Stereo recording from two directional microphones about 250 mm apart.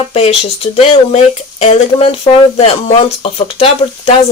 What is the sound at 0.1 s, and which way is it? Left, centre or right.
Speech, left.